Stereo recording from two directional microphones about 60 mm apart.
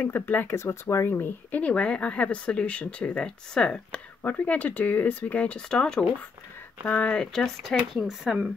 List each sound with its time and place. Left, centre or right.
0.0 s speech: left
0.6 s speech: left
1.1 s speech: left
1.6 s speech: centre
6.8 s speech: left
7.3 s speech: centre